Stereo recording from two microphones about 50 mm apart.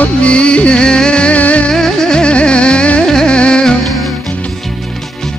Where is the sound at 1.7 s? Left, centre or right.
Centre.